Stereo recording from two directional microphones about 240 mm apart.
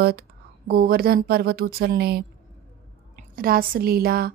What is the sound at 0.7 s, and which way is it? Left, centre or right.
Speech, right.